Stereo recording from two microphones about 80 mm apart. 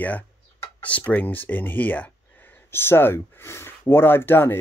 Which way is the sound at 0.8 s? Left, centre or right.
Centre.